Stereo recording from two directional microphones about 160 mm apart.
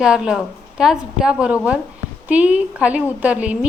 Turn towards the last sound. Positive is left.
turn(degrees=-10)  # may be behind; listen again after turning